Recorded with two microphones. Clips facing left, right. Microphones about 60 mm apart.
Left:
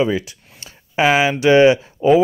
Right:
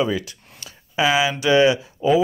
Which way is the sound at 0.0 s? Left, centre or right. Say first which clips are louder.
Left 4 dB; left.